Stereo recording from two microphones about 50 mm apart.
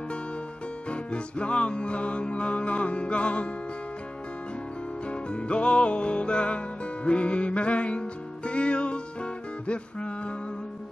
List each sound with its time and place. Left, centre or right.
0.8 s music: left
5.0 s music: left